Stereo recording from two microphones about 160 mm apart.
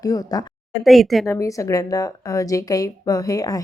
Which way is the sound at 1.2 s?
20° left (ahead or behind).